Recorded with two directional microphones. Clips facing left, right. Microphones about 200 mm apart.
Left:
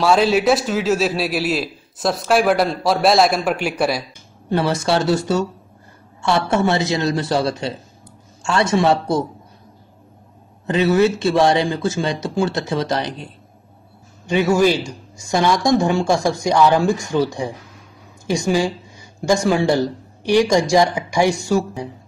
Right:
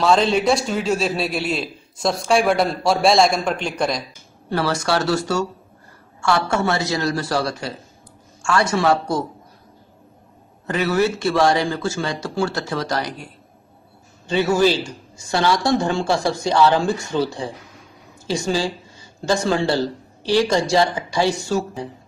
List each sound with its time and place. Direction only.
0.0 s a man's voice: 5° left (ahead or behind)
4.5 s a man's voice: 20° left (ahead or behind)
10.7 s a man's voice: 25° left (ahead or behind)
14.2 s speech: 15° left (ahead or behind)